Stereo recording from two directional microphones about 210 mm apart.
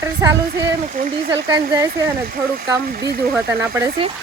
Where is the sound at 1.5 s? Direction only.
15° right (ahead or behind).